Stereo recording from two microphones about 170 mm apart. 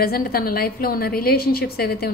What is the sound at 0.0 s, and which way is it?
A woman's voice, 65° left (ahead or behind).